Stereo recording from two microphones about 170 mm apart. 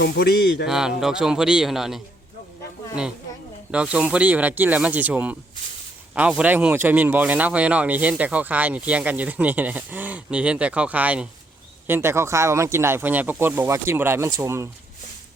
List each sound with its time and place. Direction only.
0.0 s speech: 80° left
0.7 s a man's voice: 5° right (ahead or behind)
3.7 s speech: 5° right (ahead or behind)